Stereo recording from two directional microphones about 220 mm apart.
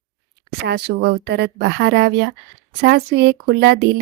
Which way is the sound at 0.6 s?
50° right (ahead or behind).